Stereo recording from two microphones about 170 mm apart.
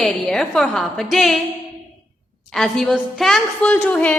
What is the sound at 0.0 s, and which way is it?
A woman's voice, 5° left (ahead or behind).